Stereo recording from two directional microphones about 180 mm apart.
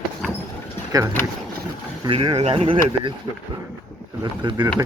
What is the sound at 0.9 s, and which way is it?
Speech, 20° right (ahead or behind).